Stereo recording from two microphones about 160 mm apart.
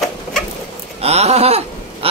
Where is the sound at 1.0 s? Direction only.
40° right (ahead or behind).